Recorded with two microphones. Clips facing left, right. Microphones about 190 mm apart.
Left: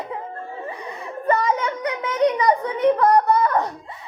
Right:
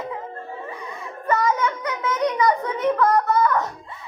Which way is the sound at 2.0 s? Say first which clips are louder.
Left 2 dB; 30° left (ahead or behind).